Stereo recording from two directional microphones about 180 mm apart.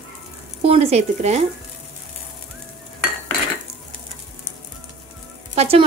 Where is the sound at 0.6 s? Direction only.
35° right (ahead or behind).